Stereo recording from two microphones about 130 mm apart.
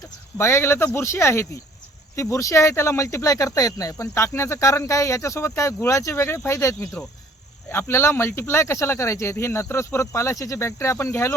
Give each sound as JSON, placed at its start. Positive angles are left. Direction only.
{"t": 0.3, "sound": "speech", "side_deg": 20}